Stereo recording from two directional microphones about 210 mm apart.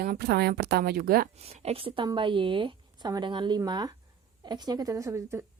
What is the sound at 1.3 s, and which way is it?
A woman's voice, 30° right (ahead or behind).